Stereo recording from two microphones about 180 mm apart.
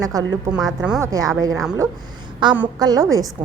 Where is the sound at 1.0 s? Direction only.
20° right (ahead or behind).